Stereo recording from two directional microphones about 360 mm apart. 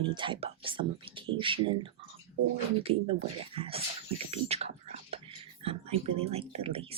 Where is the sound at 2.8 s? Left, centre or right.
Centre.